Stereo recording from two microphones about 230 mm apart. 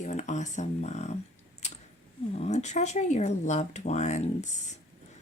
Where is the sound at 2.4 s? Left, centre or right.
Left.